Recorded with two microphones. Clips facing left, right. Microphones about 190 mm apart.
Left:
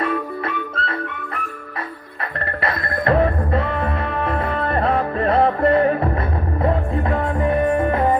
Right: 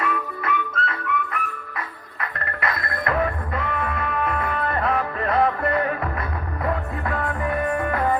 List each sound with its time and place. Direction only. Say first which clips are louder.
0.0 s music: left 4 dB; 30° left (ahead or behind)
2.6 s music: left 4 dB; 30° left (ahead or behind)